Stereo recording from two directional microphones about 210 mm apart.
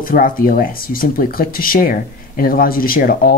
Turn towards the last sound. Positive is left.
turn(degrees=45)  # may be behind; listen again after turning